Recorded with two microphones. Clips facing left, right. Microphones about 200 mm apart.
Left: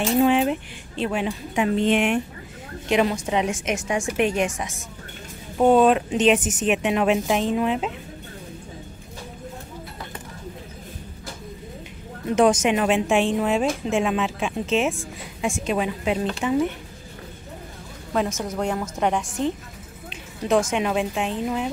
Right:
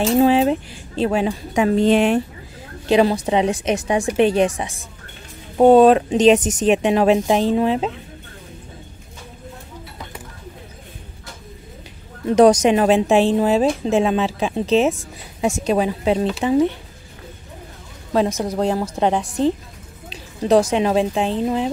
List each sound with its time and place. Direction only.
0.1 s a woman's voice: 35° right (ahead or behind)
12.4 s a woman's voice: 35° right (ahead or behind)
18.1 s a woman's voice: 35° right (ahead or behind)